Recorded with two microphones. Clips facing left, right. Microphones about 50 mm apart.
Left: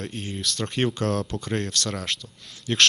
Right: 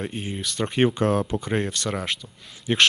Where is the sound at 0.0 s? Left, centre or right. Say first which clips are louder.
Right 1 dB; centre.